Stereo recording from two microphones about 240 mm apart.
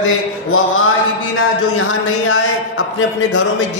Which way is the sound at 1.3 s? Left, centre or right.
Left.